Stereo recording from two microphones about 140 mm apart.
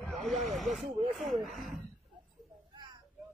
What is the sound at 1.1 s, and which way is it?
Speech, centre (ahead or behind).